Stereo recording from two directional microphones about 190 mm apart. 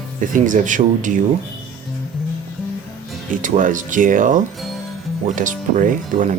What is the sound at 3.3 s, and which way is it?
Speech, 45° right (ahead or behind).